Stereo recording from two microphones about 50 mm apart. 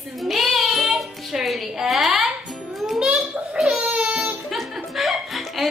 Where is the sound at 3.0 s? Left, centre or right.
Centre.